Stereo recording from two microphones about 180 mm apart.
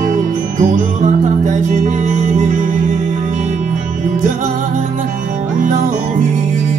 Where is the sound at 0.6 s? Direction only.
45° right (ahead or behind).